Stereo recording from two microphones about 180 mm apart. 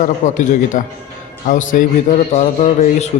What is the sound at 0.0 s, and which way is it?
A man's voice, 45° left (ahead or behind).